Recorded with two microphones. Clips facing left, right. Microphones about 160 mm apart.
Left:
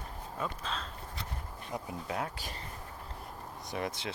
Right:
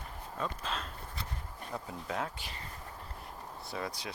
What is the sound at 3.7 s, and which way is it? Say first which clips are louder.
Speech: left 3 dB; 20° left (ahead or behind).